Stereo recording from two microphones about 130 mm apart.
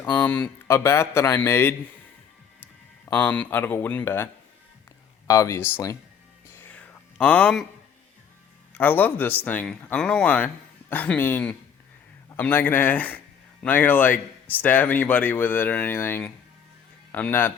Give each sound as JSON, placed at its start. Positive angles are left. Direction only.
{"t": 0.0, "sound": "a man's voice", "side_deg": 15}
{"t": 3.1, "sound": "speech", "side_deg": 10}
{"t": 5.3, "sound": "a man's voice", "side_deg": 25}
{"t": 6.5, "sound": "whispering", "side_deg": 15}
{"t": 8.7, "sound": "a man's voice", "side_deg": 15}